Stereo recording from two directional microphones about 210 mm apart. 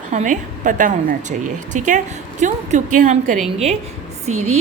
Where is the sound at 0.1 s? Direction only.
35° right (ahead or behind).